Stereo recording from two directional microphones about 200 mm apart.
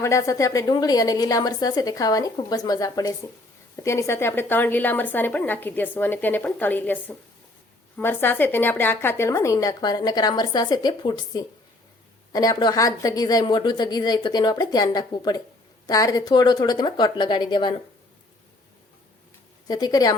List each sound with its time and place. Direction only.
0.0 s a woman's voice: 15° left (ahead or behind)
19.6 s a woman's voice: 20° left (ahead or behind)